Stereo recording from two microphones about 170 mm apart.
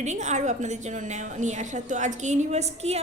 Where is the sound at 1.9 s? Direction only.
45° right (ahead or behind).